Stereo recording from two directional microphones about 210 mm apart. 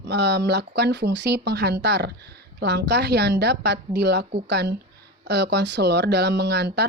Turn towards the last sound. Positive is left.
turn(degrees=-55)  # may be behind; listen again after turning